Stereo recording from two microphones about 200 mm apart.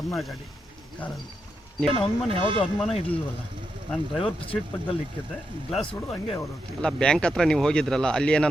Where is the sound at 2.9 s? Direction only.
30° left (ahead or behind).